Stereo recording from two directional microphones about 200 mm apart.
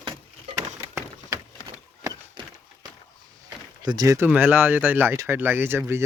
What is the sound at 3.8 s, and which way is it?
Speech, 20° right (ahead or behind).